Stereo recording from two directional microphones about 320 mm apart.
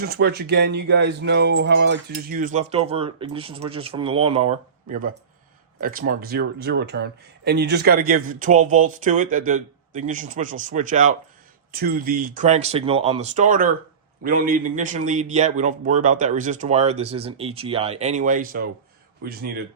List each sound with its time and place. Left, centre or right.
0.0 s speech: right